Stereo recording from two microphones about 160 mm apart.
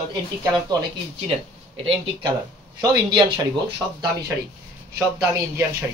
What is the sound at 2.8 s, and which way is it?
Speech, 25° right (ahead or behind).